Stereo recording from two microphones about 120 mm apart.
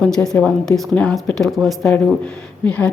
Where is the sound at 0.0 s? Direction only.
5° left (ahead or behind).